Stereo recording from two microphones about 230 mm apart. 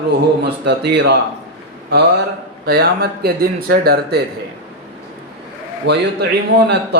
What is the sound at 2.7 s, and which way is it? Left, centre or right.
A man's voice, right.